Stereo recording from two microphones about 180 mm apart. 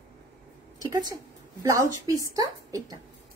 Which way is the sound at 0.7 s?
20° right (ahead or behind).